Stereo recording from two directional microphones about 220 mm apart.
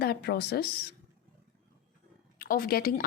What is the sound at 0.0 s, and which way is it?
Speech, 45° left (ahead or behind).